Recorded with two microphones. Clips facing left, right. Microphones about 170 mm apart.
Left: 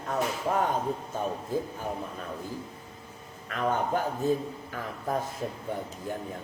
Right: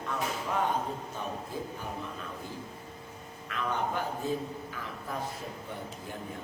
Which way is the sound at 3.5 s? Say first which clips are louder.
Left 5 dB; 45° left (ahead or behind).